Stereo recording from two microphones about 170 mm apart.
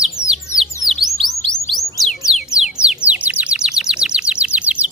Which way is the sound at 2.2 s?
5° right (ahead or behind).